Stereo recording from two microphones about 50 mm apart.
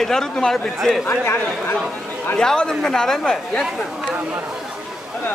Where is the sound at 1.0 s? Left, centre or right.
Left.